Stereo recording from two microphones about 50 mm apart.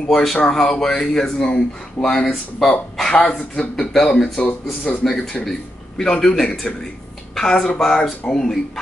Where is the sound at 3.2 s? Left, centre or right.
Left.